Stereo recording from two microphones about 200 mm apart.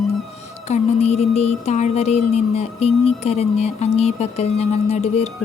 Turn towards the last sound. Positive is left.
turn(degrees=35)  # may be behind; listen again after turning